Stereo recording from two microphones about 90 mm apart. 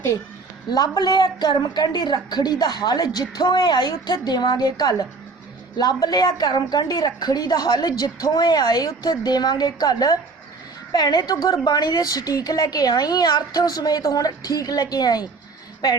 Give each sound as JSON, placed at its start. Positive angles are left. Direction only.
{"t": 0.7, "sound": "a woman's voice", "side_deg": 50}